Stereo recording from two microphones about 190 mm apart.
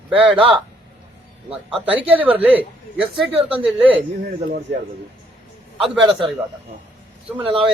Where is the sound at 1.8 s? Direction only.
10° right (ahead or behind).